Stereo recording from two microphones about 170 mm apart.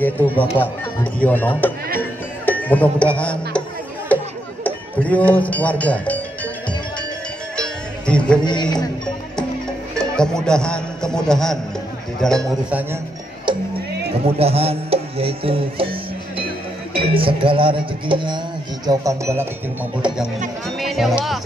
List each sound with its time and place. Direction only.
0.6 s speech: 10° left (ahead or behind)
2.0 s music: 10° left (ahead or behind)
4.1 s chatter: 10° left (ahead or behind)
4.6 s speech: 10° left (ahead or behind)
7.5 s cowbell: 5° left (ahead or behind)
8.5 s music: 25° left (ahead or behind)
9.9 s a man's voice: 5° left (ahead or behind)
13.5 s music: 30° right (ahead or behind)
14.2 s speech: 35° right (ahead or behind)
16.9 s speech: 30° right (ahead or behind)
18.9 s speech: 20° right (ahead or behind)
20.6 s music: centre (ahead or behind)